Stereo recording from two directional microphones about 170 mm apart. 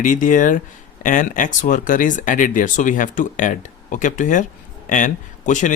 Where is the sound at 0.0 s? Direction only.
50° left (ahead or behind).